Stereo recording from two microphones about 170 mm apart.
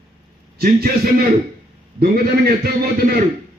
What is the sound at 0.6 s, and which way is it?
Speech, 60° right (ahead or behind).